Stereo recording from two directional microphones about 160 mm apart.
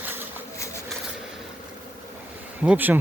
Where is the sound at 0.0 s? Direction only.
15° right (ahead or behind).